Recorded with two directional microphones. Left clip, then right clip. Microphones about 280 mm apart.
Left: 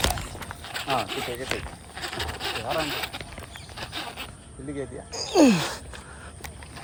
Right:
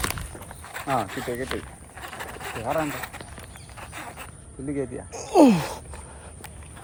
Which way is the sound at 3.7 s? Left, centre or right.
Left.